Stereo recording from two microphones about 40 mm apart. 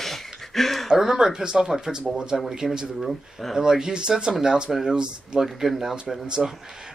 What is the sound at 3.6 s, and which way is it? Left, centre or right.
Speech, centre.